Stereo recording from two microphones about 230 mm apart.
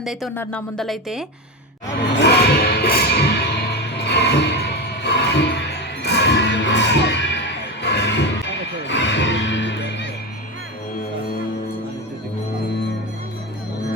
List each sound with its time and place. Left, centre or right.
0.0 s speech: centre
2.1 s music: left